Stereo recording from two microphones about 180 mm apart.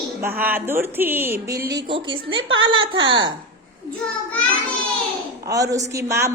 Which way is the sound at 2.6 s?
30° right (ahead or behind).